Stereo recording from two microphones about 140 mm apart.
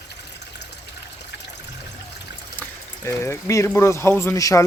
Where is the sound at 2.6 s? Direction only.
20° left (ahead or behind).